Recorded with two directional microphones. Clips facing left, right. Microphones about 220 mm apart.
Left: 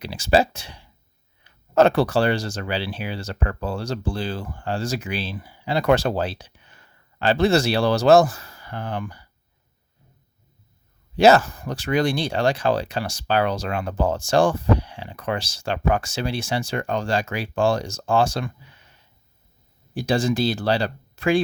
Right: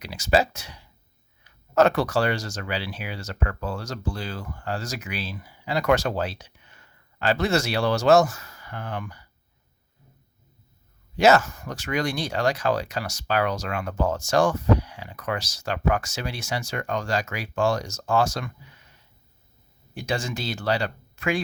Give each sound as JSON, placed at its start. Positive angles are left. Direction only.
{"t": 0.0, "sound": "speech", "side_deg": 30}
{"t": 11.2, "sound": "speech", "side_deg": 35}
{"t": 19.9, "sound": "speech", "side_deg": 35}